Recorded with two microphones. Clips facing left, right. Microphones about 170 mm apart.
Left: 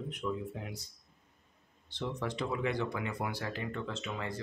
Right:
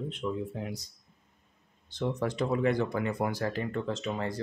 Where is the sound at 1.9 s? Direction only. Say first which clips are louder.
Right 6 dB; 45° right (ahead or behind).